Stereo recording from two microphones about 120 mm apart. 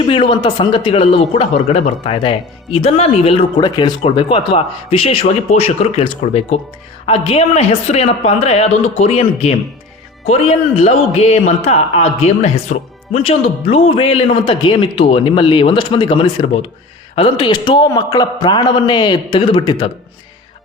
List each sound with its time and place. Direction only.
0.1 s speech: 40° left (ahead or behind)
3.6 s a man's voice: 40° left (ahead or behind); by 9.6 s 60° left (ahead or behind)
10.8 s a man's voice: 65° left (ahead or behind); by 19.9 s 35° left (ahead or behind)